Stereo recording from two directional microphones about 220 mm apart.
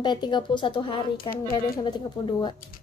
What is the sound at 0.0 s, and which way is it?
Speech, 20° left (ahead or behind).